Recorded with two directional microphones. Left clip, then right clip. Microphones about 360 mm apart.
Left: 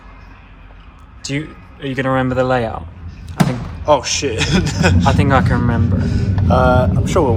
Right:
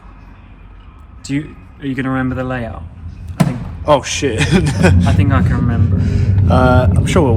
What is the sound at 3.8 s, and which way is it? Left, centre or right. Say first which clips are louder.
A man's voice: right 1 dB; centre.